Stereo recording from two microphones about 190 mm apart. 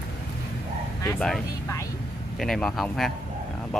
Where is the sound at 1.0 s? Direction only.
10° left (ahead or behind).